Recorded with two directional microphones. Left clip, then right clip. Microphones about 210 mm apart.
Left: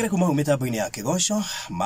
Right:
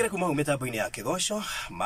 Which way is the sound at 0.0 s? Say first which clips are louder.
Left 3 dB; 25° left (ahead or behind).